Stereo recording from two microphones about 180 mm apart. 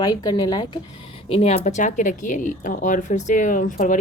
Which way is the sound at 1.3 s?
35° left (ahead or behind).